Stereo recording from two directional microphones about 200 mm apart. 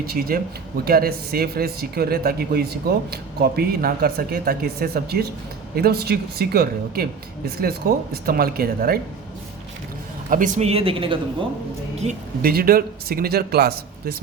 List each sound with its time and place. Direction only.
0.0 s speech: 50° right (ahead or behind)
10.2 s speech: 40° right (ahead or behind)
12.4 s speech: 50° right (ahead or behind)